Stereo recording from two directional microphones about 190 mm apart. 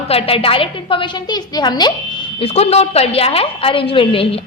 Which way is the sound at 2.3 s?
30° left (ahead or behind).